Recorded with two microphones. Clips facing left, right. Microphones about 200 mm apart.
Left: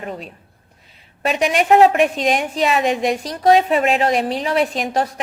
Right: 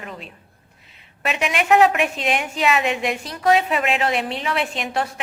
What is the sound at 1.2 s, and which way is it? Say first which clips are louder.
A woman's voice: left 5 dB; 35° left (ahead or behind).